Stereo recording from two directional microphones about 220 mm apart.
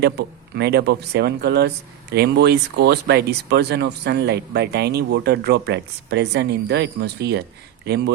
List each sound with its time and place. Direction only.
0.0 s speech: 50° right (ahead or behind)